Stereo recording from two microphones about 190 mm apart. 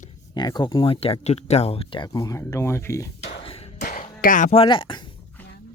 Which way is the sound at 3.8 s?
45° left (ahead or behind).